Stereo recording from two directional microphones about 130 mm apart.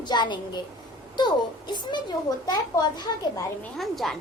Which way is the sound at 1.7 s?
35° left (ahead or behind).